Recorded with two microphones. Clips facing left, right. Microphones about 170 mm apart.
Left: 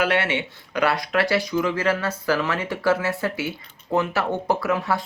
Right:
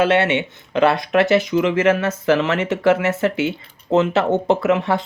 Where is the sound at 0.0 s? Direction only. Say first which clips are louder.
Right 6 dB; 20° right (ahead or behind).